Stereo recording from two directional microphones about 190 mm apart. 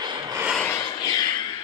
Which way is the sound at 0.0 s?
25° right (ahead or behind).